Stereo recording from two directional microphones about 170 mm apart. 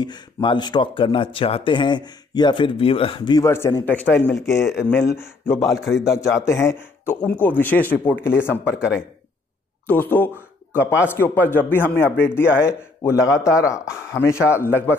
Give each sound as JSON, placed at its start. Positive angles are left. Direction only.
{"t": 0.0, "sound": "speech", "side_deg": 25}
{"t": 3.4, "sound": "a man's voice", "side_deg": 15}
{"t": 5.6, "sound": "a man's voice", "side_deg": 0}
{"t": 6.0, "sound": "a man's voice", "side_deg": 15}
{"t": 9.8, "sound": "a man's voice", "side_deg": 10}